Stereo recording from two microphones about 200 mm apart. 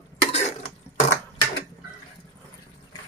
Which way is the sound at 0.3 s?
35° left (ahead or behind).